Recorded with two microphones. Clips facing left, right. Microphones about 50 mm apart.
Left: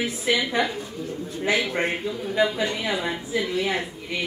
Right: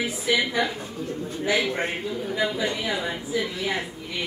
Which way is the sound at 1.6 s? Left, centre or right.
Left.